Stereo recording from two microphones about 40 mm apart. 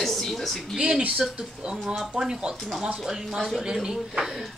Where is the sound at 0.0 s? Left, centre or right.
Centre.